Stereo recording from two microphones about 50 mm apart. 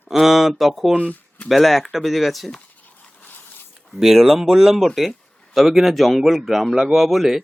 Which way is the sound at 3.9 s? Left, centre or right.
Centre.